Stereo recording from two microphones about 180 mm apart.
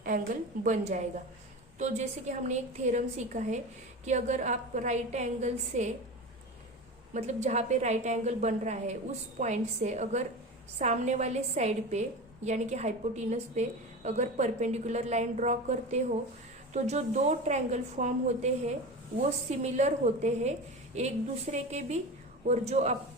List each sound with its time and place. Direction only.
0.6 s a woman's voice: 40° right (ahead or behind)
7.1 s a woman's voice: 40° right (ahead or behind)